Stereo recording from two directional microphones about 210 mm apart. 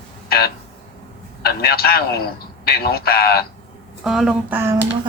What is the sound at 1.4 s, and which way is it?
A man's voice, 45° left (ahead or behind).